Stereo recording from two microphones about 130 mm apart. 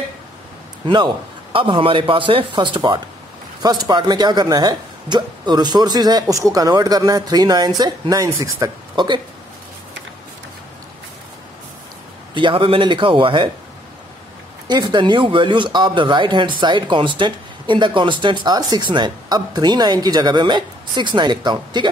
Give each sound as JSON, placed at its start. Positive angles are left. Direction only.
{"t": 0.8, "sound": "speech", "side_deg": -40}
{"t": 12.4, "sound": "speech", "side_deg": -40}
{"t": 14.7, "sound": "speech", "side_deg": -35}